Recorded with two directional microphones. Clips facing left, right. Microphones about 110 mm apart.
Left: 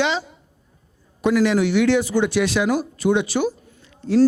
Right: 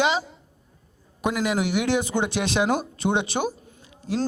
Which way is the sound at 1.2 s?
15° right (ahead or behind).